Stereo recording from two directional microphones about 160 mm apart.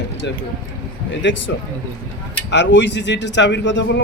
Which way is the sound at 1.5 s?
90° left.